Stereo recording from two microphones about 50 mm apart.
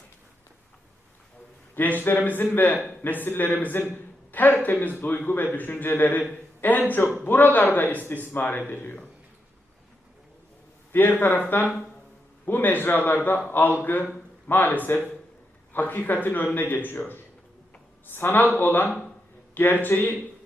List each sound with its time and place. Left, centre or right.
1.7 s a man's voice: left
10.9 s a man's voice: left
18.0 s a man's voice: left